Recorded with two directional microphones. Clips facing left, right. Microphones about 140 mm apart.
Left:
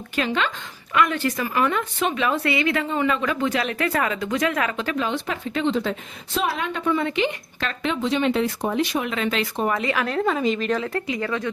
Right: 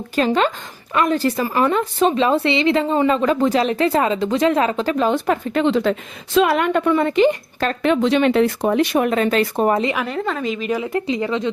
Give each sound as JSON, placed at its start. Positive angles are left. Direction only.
{"t": 0.2, "sound": "speech", "side_deg": -40}
{"t": 5.3, "sound": "speech", "side_deg": -60}
{"t": 6.3, "sound": "speech", "side_deg": -80}
{"t": 7.2, "sound": "speech", "side_deg": -40}
{"t": 10.0, "sound": "speech", "side_deg": 0}